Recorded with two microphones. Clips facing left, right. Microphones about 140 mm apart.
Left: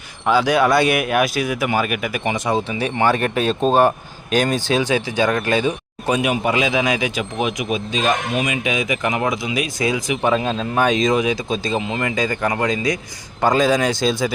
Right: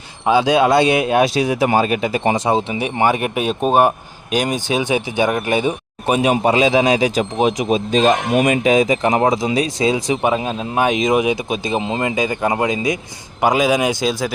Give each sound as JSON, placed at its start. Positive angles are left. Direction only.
{"t": 0.3, "sound": "speech", "side_deg": -20}
{"t": 10.2, "sound": "speech", "side_deg": -15}
{"t": 14.1, "sound": "speech", "side_deg": -5}